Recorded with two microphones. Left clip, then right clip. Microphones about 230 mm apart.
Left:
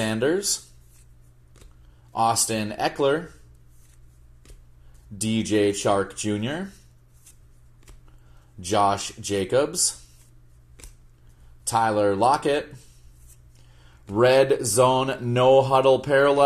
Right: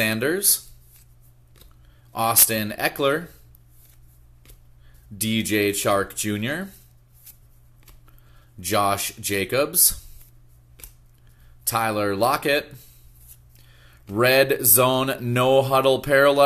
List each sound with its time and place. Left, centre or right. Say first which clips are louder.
0.0 s speech: right 1 dB; right
2.1 s speech: even; right
5.1 s speech: even; right
8.5 s speech: even; right
11.6 s speech: left 2 dB; right
13.7 s a sound: even; right
14.2 s speech: even; right